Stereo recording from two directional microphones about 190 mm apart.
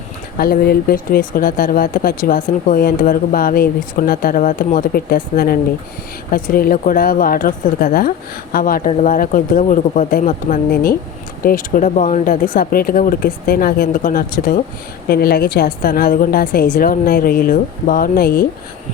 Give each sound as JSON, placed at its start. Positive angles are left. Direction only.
{"t": 0.3, "sound": "speech", "side_deg": 50}